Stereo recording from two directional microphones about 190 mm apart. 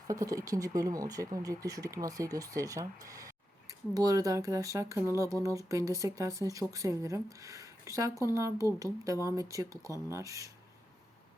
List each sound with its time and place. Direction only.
0.1 s speech: 20° right (ahead or behind)